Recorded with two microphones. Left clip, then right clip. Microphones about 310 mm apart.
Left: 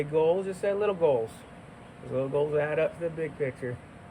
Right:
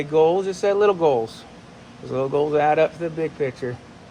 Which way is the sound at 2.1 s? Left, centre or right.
Centre.